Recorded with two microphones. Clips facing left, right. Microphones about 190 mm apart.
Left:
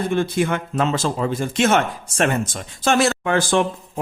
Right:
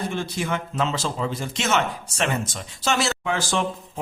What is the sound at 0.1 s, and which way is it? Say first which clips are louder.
Speech: left 7 dB; 55° left (ahead or behind).